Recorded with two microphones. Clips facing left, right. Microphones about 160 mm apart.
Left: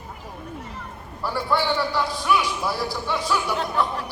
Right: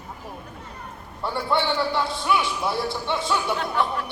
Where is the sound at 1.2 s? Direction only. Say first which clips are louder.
Even; 25° right (ahead or behind).